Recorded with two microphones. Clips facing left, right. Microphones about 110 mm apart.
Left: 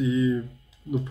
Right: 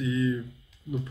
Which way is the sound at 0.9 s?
50° left (ahead or behind).